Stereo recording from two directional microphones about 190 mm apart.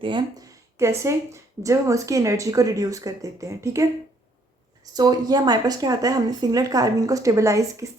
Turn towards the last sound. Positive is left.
turn(degrees=-15)  # may be behind; listen again after turning